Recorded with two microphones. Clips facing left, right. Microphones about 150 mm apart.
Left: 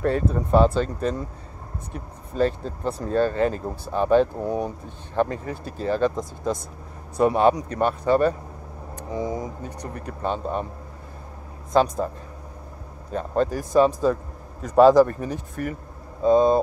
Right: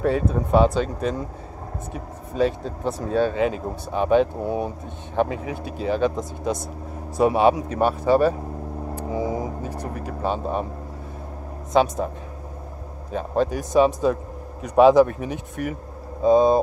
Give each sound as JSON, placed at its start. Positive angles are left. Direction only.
{"t": 0.0, "sound": "speech", "side_deg": -5}
{"t": 2.3, "sound": "speech", "side_deg": 0}
{"t": 5.6, "sound": "speech", "side_deg": -70}
{"t": 5.9, "sound": "speech", "side_deg": -5}
{"t": 9.7, "sound": "speech", "side_deg": -5}
{"t": 11.7, "sound": "speech", "side_deg": -5}
{"t": 13.1, "sound": "speech", "side_deg": -5}